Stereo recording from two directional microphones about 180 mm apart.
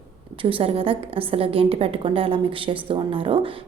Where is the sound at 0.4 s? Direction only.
30° right (ahead or behind).